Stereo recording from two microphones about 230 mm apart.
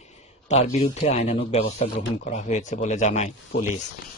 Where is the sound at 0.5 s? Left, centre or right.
Left.